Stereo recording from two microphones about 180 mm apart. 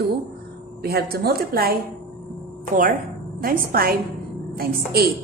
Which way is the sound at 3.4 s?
55° right (ahead or behind).